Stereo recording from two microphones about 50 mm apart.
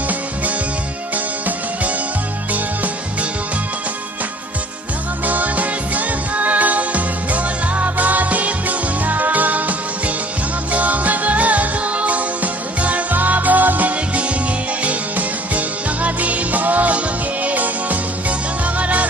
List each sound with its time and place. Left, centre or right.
1.1 s music: right
5.2 s music: right